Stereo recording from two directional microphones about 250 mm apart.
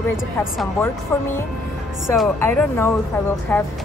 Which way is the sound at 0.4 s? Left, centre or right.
Centre.